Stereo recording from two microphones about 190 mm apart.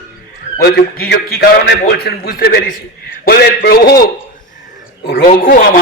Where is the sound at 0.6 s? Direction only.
55° left (ahead or behind).